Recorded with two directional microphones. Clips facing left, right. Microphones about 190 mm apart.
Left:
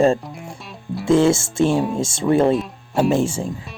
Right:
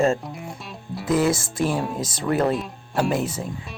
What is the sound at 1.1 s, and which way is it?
Speech, 25° left (ahead or behind).